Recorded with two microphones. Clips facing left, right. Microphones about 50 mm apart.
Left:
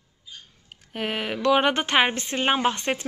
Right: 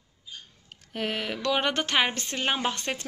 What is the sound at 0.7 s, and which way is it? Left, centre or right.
A woman's voice, centre.